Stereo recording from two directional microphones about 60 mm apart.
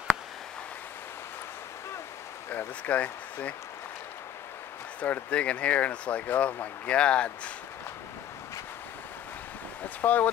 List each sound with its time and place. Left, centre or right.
2.9 s speech: left
5.0 s speech: left
10.0 s speech: left